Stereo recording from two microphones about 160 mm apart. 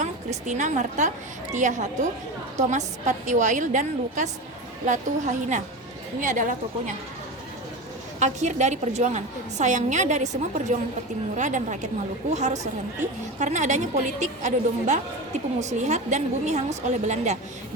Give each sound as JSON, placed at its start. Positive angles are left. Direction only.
{"t": 0.0, "sound": "a woman's voice", "side_deg": -45}
{"t": 8.2, "sound": "a woman's voice", "side_deg": -50}